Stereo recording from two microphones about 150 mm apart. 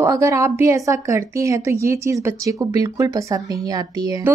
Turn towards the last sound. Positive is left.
turn(degrees=-25)  # may be behind; listen again after turning